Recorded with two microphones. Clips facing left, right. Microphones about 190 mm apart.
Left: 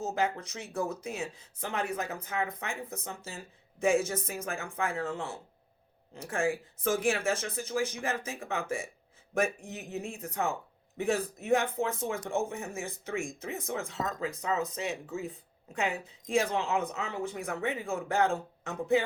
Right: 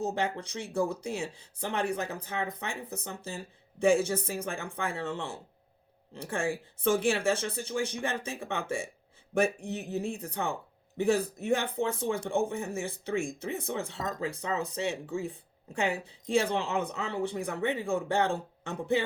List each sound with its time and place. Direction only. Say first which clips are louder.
0.0 s speech: even; 30° right (ahead or behind)